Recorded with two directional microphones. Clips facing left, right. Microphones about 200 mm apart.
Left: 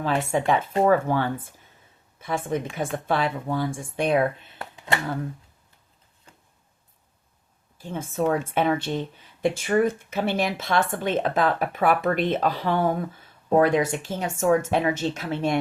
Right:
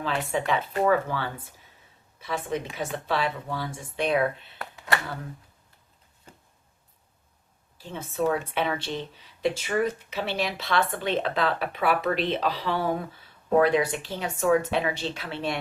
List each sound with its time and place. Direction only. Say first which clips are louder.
0.0 s speech: left 4 dB; 45° left (ahead or behind)
4.5 s a sound: left 1 dB; 25° left (ahead or behind)
7.8 s speech: left 2 dB; 50° left (ahead or behind)